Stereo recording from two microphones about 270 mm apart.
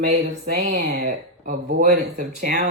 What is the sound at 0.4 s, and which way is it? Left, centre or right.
Speech, right.